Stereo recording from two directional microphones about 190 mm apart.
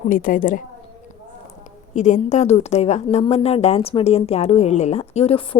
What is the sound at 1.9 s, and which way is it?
A woman's voice, 40° left (ahead or behind).